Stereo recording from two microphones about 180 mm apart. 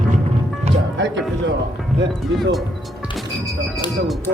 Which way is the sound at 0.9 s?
85° right.